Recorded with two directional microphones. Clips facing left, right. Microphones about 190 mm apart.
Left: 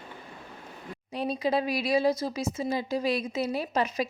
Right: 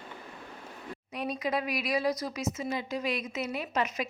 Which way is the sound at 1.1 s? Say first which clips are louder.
Left 4 dB; 30° left (ahead or behind).